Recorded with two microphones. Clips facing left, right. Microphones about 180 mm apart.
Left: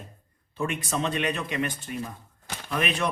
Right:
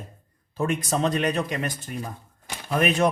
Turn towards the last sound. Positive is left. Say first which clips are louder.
# right 6 dB
turn(degrees=-45)  # may be behind; listen again after turning